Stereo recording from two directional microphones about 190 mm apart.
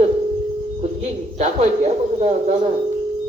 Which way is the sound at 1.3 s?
35° right (ahead or behind).